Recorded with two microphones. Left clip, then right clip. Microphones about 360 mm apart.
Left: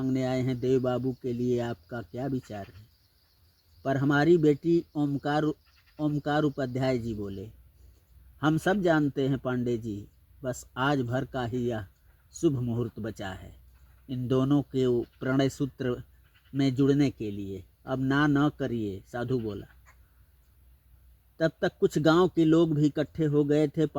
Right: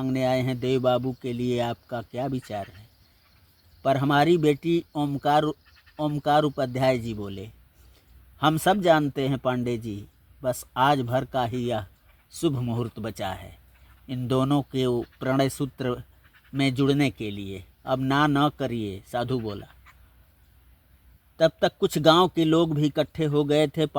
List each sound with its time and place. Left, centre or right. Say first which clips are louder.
0.0 s speech: right 5 dB; right
3.8 s speech: right 4 dB; right
8.4 s speech: right 5 dB; right
21.3 s speech: right 6 dB; right